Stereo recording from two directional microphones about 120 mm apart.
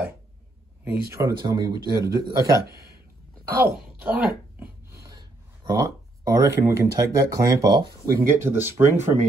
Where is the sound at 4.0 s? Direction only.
15° right (ahead or behind).